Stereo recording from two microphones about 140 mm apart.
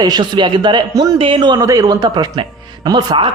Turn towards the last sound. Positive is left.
turn(degrees=-35)  # may be behind; listen again after turning